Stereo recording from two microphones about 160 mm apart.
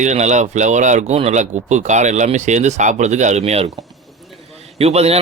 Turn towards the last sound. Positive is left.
turn(degrees=-40)  # may be behind; listen again after turning